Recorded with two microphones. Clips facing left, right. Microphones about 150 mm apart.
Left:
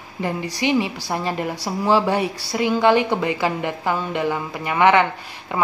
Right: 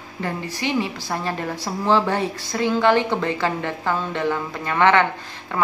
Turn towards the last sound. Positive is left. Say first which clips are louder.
# left 1 dB
turn(degrees=15)  # may be behind; listen again after turning